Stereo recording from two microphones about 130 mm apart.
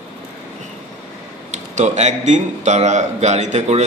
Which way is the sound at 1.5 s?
60° right (ahead or behind).